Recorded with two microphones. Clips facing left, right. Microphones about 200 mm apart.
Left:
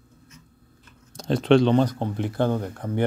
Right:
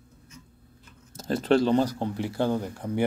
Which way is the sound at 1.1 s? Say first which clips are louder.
Left 3 dB; 5° right (ahead or behind).